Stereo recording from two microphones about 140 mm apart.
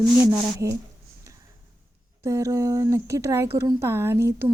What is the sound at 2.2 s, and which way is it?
Speech, 20° right (ahead or behind).